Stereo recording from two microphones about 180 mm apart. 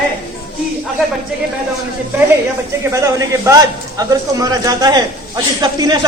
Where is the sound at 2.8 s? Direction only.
15° right (ahead or behind).